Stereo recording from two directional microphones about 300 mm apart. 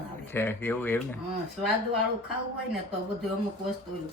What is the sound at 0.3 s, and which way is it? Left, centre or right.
Speech, centre.